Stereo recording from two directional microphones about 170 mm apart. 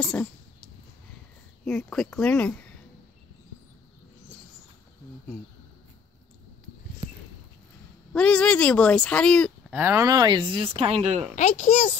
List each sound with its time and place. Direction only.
0.0 s speech: 5° left (ahead or behind)
1.6 s speech: 5° left (ahead or behind)
8.1 s speech: 5° left (ahead or behind)
9.8 s speech: 15° right (ahead or behind); by 11.2 s 40° right (ahead or behind)
11.3 s a child's voice: 45° left (ahead or behind)